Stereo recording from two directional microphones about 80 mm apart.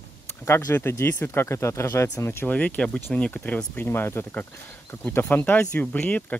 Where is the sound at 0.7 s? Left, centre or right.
Left.